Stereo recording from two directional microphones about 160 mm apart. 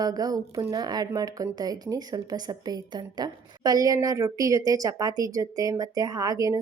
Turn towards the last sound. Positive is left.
turn(degrees=-20)  # may be behind; listen again after turning